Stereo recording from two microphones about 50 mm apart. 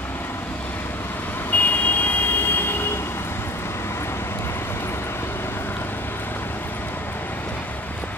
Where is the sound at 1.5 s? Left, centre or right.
Left.